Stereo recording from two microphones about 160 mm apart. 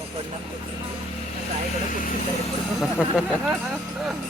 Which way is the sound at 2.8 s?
5° right (ahead or behind).